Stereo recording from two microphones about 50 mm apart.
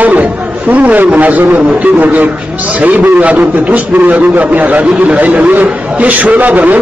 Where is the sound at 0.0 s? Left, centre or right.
Right.